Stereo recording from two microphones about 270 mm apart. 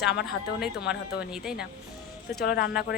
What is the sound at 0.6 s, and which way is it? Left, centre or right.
A woman's voice, centre.